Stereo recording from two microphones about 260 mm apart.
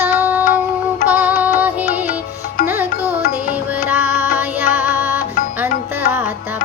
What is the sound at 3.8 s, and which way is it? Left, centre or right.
Music, centre.